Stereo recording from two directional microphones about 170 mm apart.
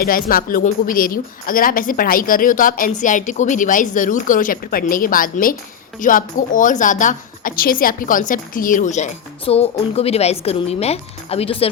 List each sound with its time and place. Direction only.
0.0 s a woman's voice: 60° left (ahead or behind); by 11.7 s 35° left (ahead or behind)